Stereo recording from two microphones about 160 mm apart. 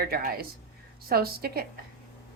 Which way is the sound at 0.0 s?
70° right (ahead or behind).